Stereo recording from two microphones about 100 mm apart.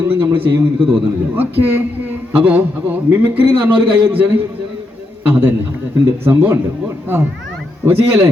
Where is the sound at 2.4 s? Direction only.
15° right (ahead or behind).